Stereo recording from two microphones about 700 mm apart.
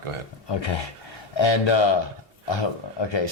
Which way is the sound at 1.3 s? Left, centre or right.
Left.